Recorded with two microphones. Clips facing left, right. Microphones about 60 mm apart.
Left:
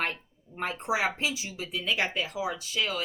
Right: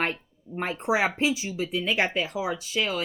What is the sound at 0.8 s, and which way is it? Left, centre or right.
Speech, right.